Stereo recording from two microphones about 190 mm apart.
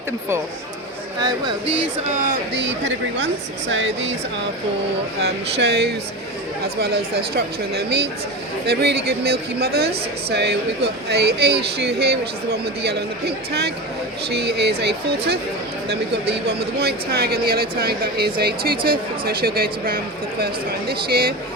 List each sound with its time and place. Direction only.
1.6 s speech: 80° right
5.2 s speech: 60° right (ahead or behind)
7.3 s speech: 60° right (ahead or behind)